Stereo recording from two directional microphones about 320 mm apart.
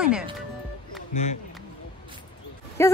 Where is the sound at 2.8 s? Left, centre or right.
Centre.